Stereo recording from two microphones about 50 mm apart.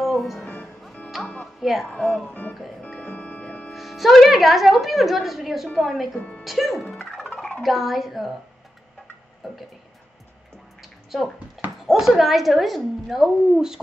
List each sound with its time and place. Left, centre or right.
0.0 s music: centre
0.4 s music: left
1.6 s speech: centre
2.0 s speech: centre
3.2 s music: left
3.7 s speech: centre
6.1 s speech: centre
6.4 s speech: centre
6.9 s speech: centre
7.6 s speech: centre
9.4 s speech: centre
10.8 s bathtub: centre
11.8 s speech: centre